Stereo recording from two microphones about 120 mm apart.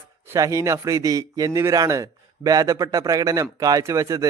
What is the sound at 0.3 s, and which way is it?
A man's voice, 25° right (ahead or behind).